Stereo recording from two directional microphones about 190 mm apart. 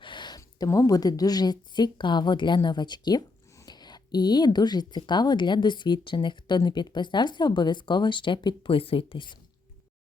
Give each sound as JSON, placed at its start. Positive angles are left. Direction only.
{"t": 0.0, "sound": "a woman's voice", "side_deg": 25}